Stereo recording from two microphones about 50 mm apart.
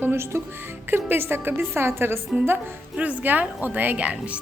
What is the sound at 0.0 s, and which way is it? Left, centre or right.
A woman's voice, right.